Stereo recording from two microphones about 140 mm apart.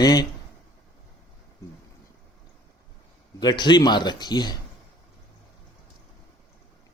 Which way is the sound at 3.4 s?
30° left (ahead or behind).